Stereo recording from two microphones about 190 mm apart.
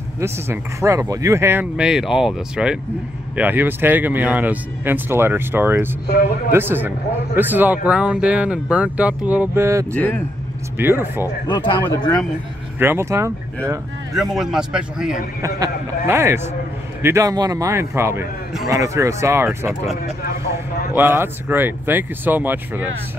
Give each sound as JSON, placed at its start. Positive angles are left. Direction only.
{"t": 0.2, "sound": "speech", "side_deg": -15}
{"t": 6.0, "sound": "speech", "side_deg": 55}
{"t": 6.5, "sound": "speech", "side_deg": -10}
{"t": 9.9, "sound": "speech", "side_deg": 5}
{"t": 10.8, "sound": "speech", "side_deg": -10}
{"t": 12.7, "sound": "speech", "side_deg": -10}
{"t": 14.1, "sound": "a man's voice", "side_deg": 0}
{"t": 15.4, "sound": "speech", "side_deg": -15}
{"t": 20.9, "sound": "speech", "side_deg": -10}